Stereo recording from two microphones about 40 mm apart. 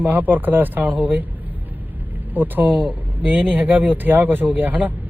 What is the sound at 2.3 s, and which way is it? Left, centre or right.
Speech, right.